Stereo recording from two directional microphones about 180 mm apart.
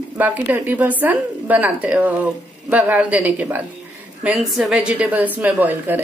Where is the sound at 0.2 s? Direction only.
10° right (ahead or behind).